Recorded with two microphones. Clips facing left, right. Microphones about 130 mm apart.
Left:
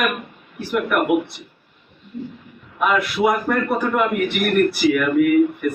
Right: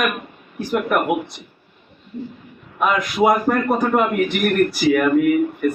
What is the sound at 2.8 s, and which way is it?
A man's voice, 40° right (ahead or behind).